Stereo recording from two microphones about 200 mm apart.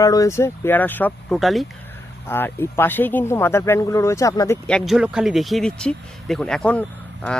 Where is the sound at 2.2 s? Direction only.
10° left (ahead or behind).